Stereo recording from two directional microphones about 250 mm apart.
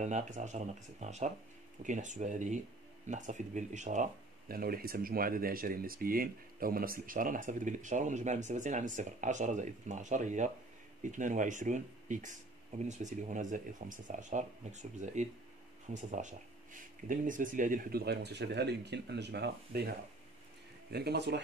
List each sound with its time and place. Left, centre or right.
0.0 s speech: right
20.9 s speech: right